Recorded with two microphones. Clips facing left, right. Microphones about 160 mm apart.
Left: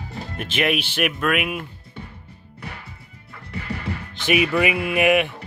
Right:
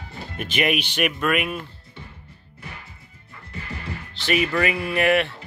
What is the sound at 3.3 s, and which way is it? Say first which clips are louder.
Music: left 6 dB; 70° left (ahead or behind).